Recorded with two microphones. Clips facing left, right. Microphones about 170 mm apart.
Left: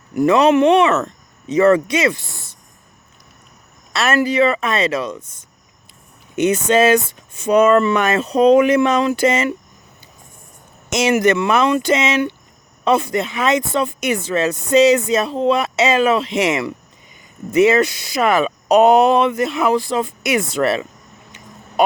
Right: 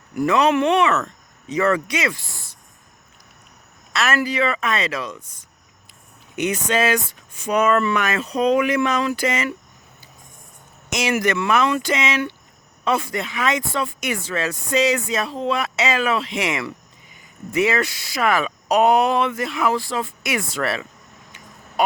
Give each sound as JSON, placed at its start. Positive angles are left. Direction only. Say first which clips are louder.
{"t": 0.2, "sound": "speech", "louder": "left 5 dB", "side_deg": 25}
{"t": 3.9, "sound": "speech", "louder": "left 5 dB", "side_deg": 30}
{"t": 10.9, "sound": "speech", "louder": "left 6 dB", "side_deg": 25}
{"t": 21.8, "sound": "hum", "louder": "left 5 dB", "side_deg": 25}